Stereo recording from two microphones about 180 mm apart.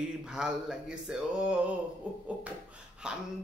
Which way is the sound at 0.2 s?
5° right (ahead or behind).